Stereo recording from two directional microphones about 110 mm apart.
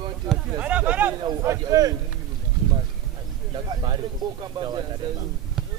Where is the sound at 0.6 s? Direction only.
15° right (ahead or behind).